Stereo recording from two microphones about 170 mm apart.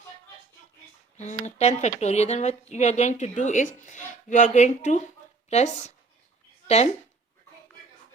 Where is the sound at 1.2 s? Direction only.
40° left (ahead or behind).